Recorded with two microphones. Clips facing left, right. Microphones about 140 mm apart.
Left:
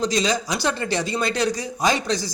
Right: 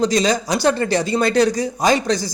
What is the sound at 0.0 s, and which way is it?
A man's voice, 40° right (ahead or behind).